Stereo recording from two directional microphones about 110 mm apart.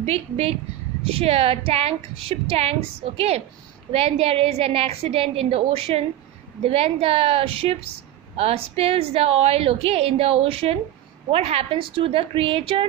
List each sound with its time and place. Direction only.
0.0 s a woman's voice: 65° right (ahead or behind)